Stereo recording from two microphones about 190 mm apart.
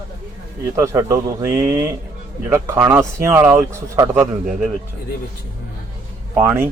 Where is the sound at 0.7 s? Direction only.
15° right (ahead or behind).